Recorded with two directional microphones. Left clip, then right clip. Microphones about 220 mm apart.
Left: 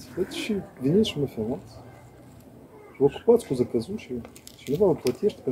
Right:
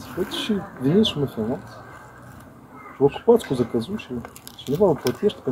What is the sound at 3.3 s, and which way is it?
Speech, 5° right (ahead or behind).